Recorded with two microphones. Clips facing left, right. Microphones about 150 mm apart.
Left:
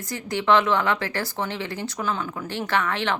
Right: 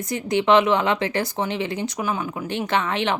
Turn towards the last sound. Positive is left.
turn(degrees=-20)  # may be behind; listen again after turning